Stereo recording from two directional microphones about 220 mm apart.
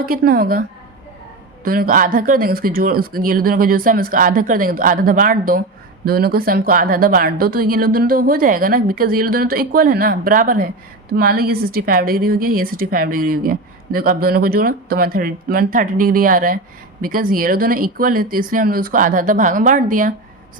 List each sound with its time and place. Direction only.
0.0 s a woman's voice: 40° right (ahead or behind)
1.6 s a woman's voice: 40° right (ahead or behind)